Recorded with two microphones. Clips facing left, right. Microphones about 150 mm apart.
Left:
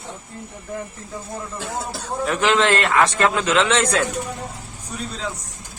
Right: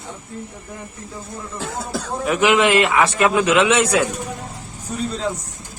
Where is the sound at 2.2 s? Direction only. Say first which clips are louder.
Right 2 dB; 10° right (ahead or behind).